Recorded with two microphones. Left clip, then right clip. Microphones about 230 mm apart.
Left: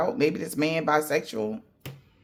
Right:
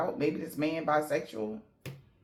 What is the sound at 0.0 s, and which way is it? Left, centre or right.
Speech, left.